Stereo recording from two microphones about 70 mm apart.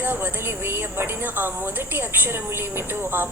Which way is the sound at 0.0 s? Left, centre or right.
Right.